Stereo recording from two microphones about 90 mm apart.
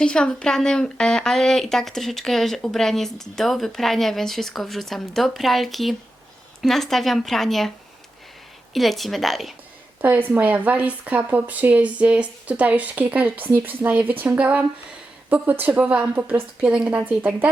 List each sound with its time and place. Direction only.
0.0 s a woman's voice: 10° left (ahead or behind)
8.7 s a woman's voice: centre (ahead or behind)
10.0 s speech: 20° right (ahead or behind)